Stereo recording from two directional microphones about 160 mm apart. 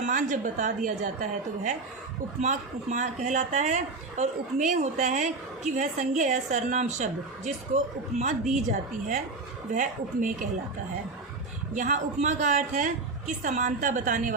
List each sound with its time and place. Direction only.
0.0 s a woman's voice: 50° right (ahead or behind)
9.7 s a woman's voice: 55° right (ahead or behind)
11.7 s a woman's voice: 50° right (ahead or behind)